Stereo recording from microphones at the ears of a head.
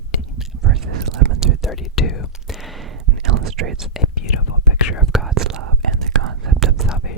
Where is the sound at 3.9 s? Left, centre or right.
Left.